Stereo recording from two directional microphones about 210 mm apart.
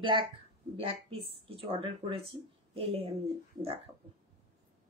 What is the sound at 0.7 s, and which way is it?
A woman's voice, 25° right (ahead or behind).